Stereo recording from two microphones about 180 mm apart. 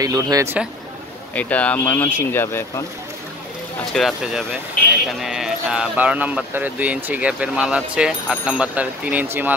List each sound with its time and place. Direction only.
0.0 s speech: 20° right (ahead or behind)
1.3 s speech: 10° left (ahead or behind)
3.9 s speech: centre (ahead or behind)